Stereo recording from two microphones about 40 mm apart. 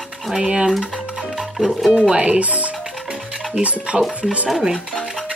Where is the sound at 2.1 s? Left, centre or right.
Right.